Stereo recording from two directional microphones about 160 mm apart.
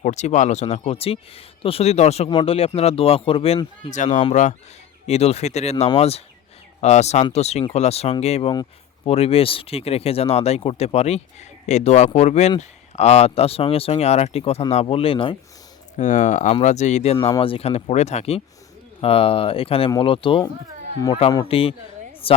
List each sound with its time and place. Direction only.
0.0 s speech: 45° left (ahead or behind)
3.8 s speech: 50° left (ahead or behind); by 15.4 s 35° left (ahead or behind)
16.0 s speech: 50° left (ahead or behind)
17.2 s speech: 30° left (ahead or behind)